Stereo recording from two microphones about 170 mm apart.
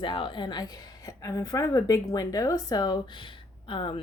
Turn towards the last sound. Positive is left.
turn(degrees=30)  # may be behind; listen again after turning